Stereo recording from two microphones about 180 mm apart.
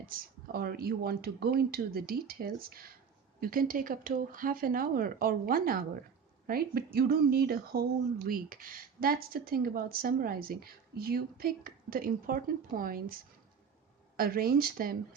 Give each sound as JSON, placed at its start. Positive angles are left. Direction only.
{"t": 0.0, "sound": "speech", "side_deg": -55}
{"t": 14.2, "sound": "speech", "side_deg": -55}